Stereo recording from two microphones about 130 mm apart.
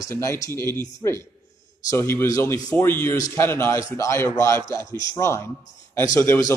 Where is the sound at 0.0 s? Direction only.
25° left (ahead or behind).